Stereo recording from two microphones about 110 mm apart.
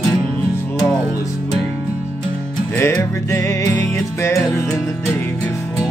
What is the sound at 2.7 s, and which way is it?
Music, 25° left (ahead or behind).